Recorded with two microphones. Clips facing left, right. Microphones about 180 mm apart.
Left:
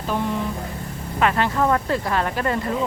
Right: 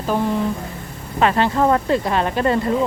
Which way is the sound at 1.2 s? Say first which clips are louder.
Right 3 dB; 30° right (ahead or behind).